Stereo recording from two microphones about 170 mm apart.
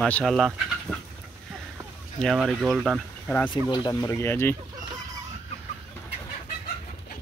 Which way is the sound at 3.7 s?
20° left (ahead or behind).